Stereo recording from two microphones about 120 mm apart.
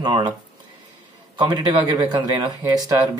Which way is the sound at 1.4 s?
40° right (ahead or behind).